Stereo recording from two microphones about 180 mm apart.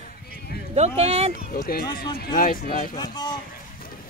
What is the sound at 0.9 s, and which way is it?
Speech, 35° right (ahead or behind).